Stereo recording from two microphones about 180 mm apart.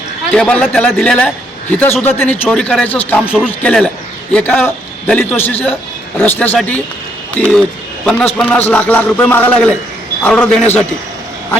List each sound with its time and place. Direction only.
0.3 s a man's voice: 5° left (ahead or behind)